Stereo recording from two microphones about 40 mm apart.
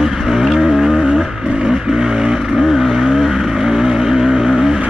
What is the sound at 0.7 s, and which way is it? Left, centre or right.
Vehicle, centre.